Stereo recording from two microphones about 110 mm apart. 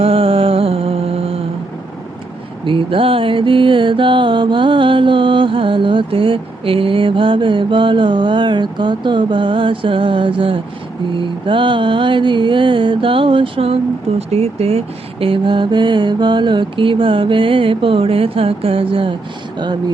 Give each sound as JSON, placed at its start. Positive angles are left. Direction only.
{"t": 0.0, "sound": "music", "side_deg": -60}
{"t": 2.6, "sound": "music", "side_deg": -50}
{"t": 14.2, "sound": "music", "side_deg": -70}